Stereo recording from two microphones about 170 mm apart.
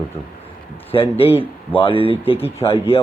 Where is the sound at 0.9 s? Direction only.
35° left (ahead or behind).